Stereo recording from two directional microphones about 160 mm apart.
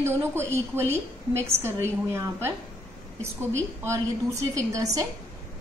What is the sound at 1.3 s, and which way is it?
A woman's voice, 15° right (ahead or behind).